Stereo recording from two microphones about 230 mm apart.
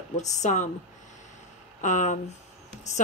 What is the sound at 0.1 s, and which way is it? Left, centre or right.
Speech, left.